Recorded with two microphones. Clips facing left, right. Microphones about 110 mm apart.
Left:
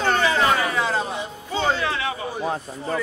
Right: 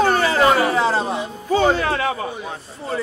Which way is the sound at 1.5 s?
45° right (ahead or behind).